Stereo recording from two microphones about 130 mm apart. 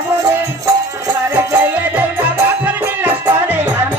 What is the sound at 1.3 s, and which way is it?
Music, 15° right (ahead or behind).